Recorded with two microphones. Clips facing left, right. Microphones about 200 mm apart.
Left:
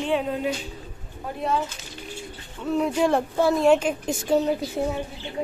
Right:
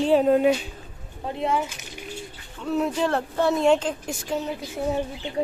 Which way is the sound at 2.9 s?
10° left (ahead or behind).